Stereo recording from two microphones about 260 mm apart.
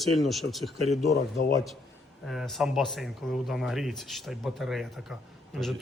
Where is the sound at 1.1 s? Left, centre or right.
Left.